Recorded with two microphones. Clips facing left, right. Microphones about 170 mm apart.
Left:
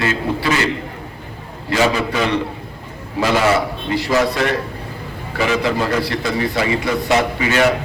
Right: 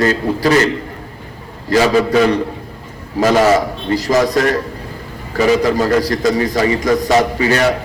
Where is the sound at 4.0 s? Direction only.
40° right (ahead or behind).